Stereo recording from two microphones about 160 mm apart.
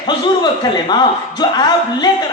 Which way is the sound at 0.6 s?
25° left (ahead or behind).